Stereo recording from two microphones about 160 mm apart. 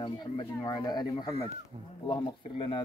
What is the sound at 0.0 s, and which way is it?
Speech, 25° left (ahead or behind).